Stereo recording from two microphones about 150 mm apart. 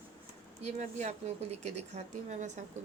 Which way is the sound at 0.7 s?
50° right (ahead or behind).